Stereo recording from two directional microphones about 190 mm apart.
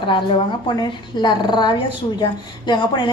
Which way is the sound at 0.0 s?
25° left (ahead or behind).